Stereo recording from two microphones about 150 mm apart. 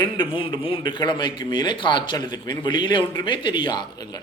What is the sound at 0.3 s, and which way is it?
A man's voice, 35° left (ahead or behind).